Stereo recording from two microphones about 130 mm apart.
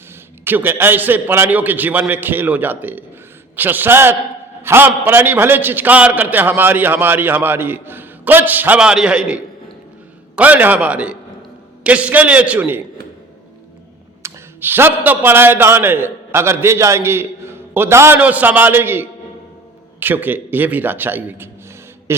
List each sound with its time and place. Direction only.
0.4 s a man's voice: 15° right (ahead or behind)
14.2 s a man's voice: 20° right (ahead or behind)